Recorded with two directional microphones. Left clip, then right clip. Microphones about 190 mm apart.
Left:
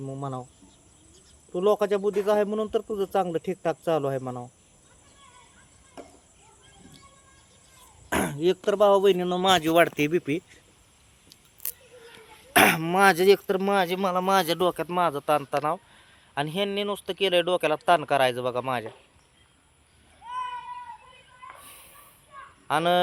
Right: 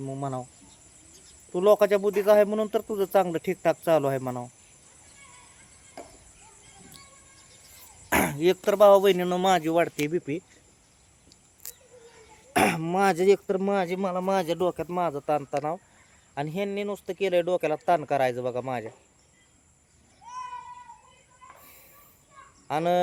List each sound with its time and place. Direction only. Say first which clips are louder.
0.0 s speech: right 2 dB; 15° right (ahead or behind)
1.5 s a man's voice: right 3 dB; 15° right (ahead or behind)
8.1 s speech: right 2 dB; 15° right (ahead or behind)
9.6 s speech: left 4 dB; 15° left (ahead or behind)
11.6 s a sound: left 4 dB; 40° left (ahead or behind)
12.5 s speech: left 4 dB; centre (ahead or behind)
21.6 s a sound: left 5 dB; centre (ahead or behind)
22.6 s speech: left 2 dB; 5° right (ahead or behind)